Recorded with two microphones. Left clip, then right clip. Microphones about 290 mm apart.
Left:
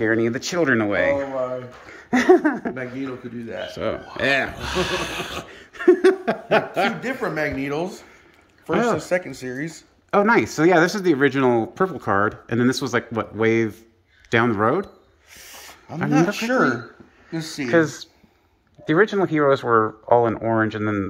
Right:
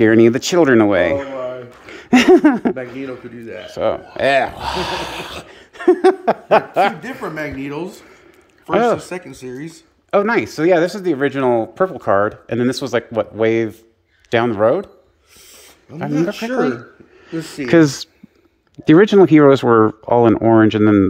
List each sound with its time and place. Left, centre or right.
0.0 s speech: right
1.9 s a sound: right
3.0 s speech: centre
7.0 s speech: centre
8.6 s speech: centre
9.0 s speech: centre
15.4 s a sound: centre
17.5 s speech: right